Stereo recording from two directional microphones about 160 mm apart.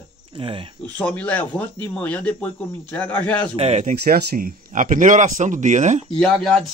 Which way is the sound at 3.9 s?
65° right (ahead or behind).